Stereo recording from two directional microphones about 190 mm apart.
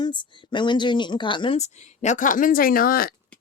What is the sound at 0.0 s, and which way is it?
A woman's voice, 25° left (ahead or behind).